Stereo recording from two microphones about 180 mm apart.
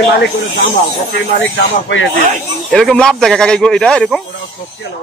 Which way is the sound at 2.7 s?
5° left (ahead or behind).